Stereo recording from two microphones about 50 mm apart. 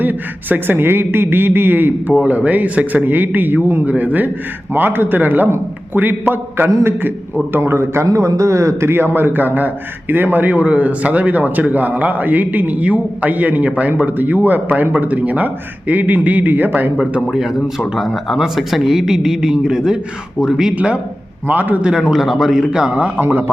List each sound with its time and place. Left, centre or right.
0.0 s speech: right
2.2 s a man's voice: right
3.8 s a man's voice: right
8.9 s a man's voice: right
17.7 s a man's voice: centre
18.0 s a man's voice: centre
20.7 s speech: right
21.4 s a man's voice: right
21.9 s a man's voice: centre
22.9 s speech: right
23.1 s a man's voice: right